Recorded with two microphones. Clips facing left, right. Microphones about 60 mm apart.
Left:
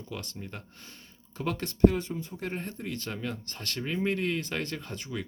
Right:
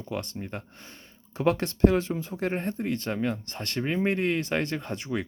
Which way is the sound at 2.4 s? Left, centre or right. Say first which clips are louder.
Right 8 dB; right.